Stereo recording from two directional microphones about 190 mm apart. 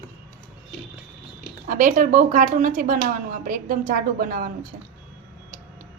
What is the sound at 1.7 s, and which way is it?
Speech, 45° right (ahead or behind).